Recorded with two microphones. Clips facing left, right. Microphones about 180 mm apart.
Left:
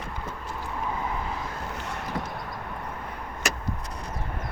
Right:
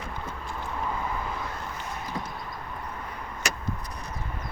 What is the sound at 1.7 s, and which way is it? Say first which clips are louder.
Boat: left 2 dB; 70° left (ahead or behind).